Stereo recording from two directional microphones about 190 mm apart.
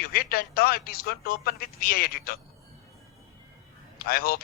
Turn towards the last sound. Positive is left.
turn(degrees=50)  # may be behind; listen again after turning